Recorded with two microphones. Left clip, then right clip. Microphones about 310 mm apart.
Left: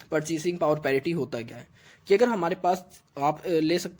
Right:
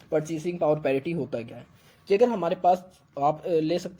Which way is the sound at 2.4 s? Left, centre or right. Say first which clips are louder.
Right 3 dB; left.